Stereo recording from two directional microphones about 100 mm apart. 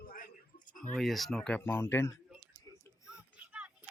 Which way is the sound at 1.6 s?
25° left (ahead or behind).